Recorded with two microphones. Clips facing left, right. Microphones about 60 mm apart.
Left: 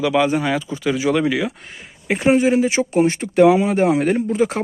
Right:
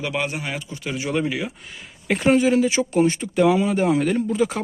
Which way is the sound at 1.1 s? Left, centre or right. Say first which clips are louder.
Left 5 dB; left.